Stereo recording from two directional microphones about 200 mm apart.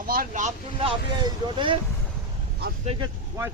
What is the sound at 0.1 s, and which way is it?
Speech, 40° right (ahead or behind).